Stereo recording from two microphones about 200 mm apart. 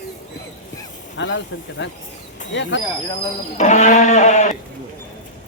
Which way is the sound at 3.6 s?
35° left (ahead or behind).